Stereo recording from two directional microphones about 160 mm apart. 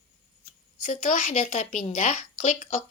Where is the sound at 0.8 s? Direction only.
55° left (ahead or behind).